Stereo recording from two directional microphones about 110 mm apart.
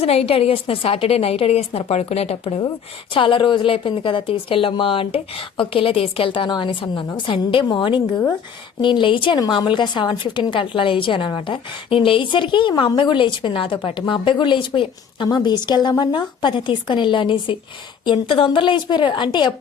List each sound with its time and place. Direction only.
0.0 s a woman's voice: 65° left (ahead or behind)
3.2 s a woman's voice: 50° left (ahead or behind)